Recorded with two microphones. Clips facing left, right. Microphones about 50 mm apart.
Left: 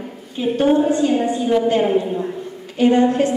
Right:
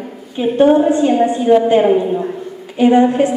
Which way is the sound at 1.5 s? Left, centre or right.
Right.